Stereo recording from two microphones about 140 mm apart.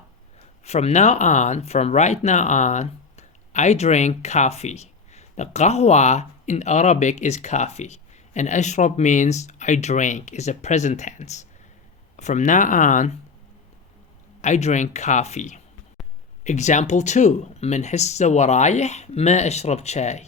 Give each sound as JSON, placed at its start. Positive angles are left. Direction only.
{"t": 0.6, "sound": "speech", "side_deg": 50}
{"t": 14.4, "sound": "speech", "side_deg": 55}